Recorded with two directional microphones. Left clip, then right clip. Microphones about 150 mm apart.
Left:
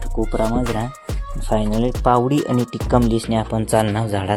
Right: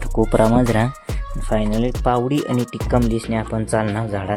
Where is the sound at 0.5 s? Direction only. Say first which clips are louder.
Right 5 dB; 45° right (ahead or behind).